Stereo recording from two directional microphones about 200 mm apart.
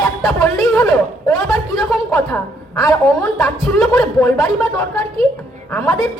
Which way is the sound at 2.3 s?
20° left (ahead or behind).